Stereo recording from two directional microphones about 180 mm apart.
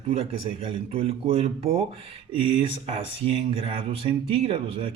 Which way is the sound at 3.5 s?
30° right (ahead or behind).